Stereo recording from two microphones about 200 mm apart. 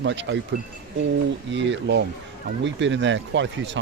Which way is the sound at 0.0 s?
65° right (ahead or behind).